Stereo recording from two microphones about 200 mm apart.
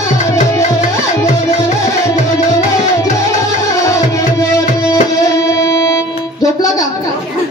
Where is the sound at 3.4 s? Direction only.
15° left (ahead or behind).